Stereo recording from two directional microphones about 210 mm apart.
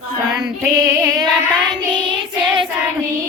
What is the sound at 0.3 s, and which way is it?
Female singing, centre (ahead or behind).